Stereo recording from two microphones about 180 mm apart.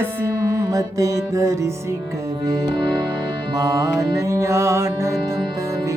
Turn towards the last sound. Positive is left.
turn(degrees=-15)  # may be behind; listen again after turning